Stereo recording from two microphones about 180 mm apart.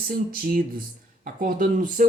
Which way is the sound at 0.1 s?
55° right (ahead or behind).